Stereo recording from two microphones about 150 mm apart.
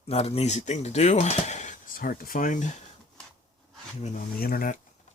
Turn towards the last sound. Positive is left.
turn(degrees=75)  # may be behind; listen again after turning